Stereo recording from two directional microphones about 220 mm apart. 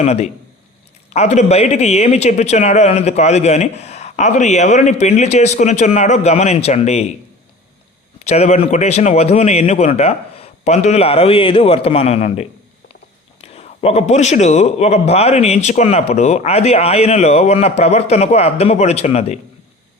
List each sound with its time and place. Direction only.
0.0 s a man's voice: 30° left (ahead or behind)
8.2 s a man's voice: 30° left (ahead or behind)